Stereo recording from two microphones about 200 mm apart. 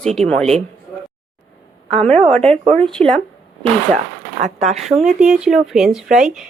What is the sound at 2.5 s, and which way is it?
Speech, 30° right (ahead or behind).